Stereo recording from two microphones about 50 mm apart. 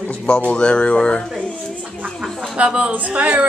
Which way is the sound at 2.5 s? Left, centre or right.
Right.